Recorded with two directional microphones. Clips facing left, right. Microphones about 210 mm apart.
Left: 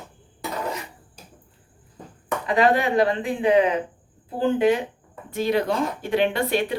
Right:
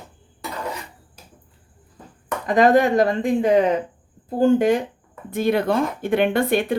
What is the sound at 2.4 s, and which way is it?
Speech, 45° right (ahead or behind).